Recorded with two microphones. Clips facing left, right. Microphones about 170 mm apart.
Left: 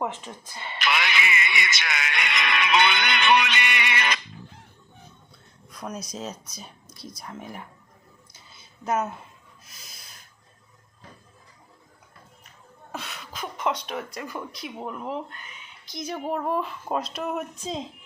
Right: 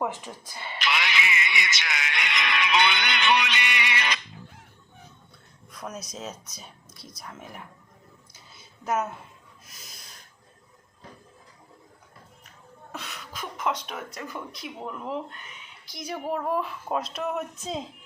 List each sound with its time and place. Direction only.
0.3 s speech: 10° right (ahead or behind)
0.8 s speech: 55° left (ahead or behind)
5.7 s speech: centre (ahead or behind)
8.5 s a sound: centre (ahead or behind)
9.6 s snort: centre (ahead or behind)
13.0 s speech: centre (ahead or behind)